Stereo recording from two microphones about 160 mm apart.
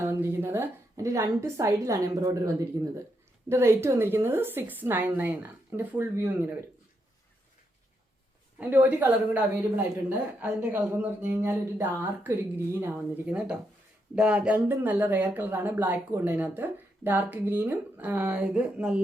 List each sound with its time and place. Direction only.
0.0 s a woman's voice: 15° right (ahead or behind)
3.5 s speech: 15° right (ahead or behind)
8.5 s speech: 10° right (ahead or behind)